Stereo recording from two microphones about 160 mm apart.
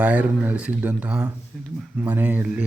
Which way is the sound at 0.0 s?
10° right (ahead or behind).